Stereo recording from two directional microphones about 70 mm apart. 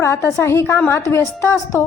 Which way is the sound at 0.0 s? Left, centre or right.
Left.